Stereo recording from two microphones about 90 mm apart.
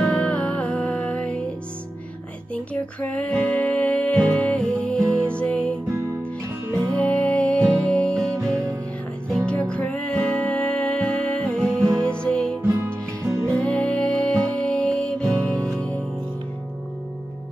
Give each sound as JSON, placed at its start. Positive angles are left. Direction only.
{"t": 0.0, "sound": "music", "side_deg": 15}
{"t": 2.5, "sound": "music", "side_deg": 15}
{"t": 6.9, "sound": "music", "side_deg": 15}
{"t": 9.5, "sound": "music", "side_deg": 15}
{"t": 12.6, "sound": "music", "side_deg": -30}
{"t": 13.6, "sound": "music", "side_deg": 10}